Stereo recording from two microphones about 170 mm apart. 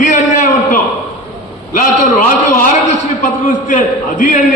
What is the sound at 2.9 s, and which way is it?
A man's voice, 45° left (ahead or behind).